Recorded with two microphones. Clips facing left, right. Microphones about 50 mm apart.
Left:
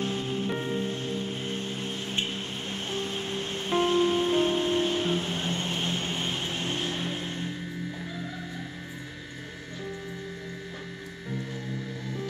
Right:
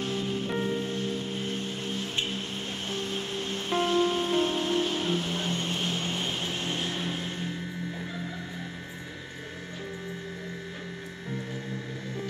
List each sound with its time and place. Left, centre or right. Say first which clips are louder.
0.0 s music: left 1 dB; centre
1.5 s vehicle: even; left
2.9 s music: left 1 dB; left; by 7.4 s centre